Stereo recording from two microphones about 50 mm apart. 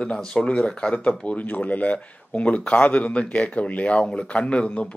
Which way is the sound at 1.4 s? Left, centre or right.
Left.